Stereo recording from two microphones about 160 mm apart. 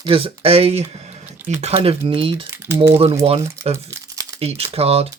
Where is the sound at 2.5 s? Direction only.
15° right (ahead or behind).